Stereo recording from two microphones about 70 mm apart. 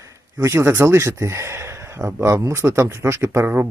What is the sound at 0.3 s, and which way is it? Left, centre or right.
Speech, right.